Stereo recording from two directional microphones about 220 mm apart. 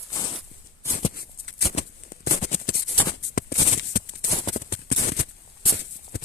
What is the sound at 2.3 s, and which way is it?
Music, 30° left (ahead or behind).